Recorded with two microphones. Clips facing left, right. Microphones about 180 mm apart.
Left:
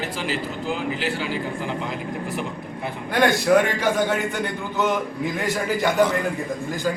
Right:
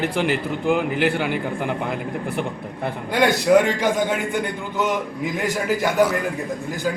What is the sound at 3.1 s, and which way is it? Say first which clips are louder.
A man's voice: right 1 dB; 15° right (ahead or behind).